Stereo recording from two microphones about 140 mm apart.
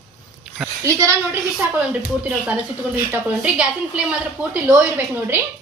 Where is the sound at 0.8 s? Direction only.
20° right (ahead or behind).